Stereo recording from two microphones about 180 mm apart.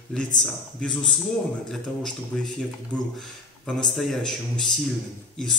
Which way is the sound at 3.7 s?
Centre (ahead or behind).